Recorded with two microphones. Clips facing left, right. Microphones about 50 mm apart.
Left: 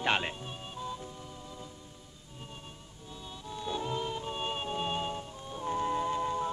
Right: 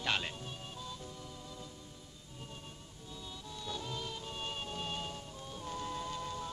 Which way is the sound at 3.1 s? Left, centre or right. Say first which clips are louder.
Left 4 dB; left.